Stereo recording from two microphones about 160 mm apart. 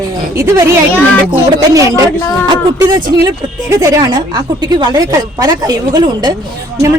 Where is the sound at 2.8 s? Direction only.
20° right (ahead or behind).